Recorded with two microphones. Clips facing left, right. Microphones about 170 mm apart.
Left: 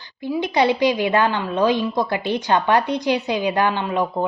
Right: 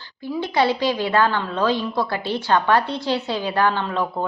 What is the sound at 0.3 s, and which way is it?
A woman's voice, 20° left (ahead or behind).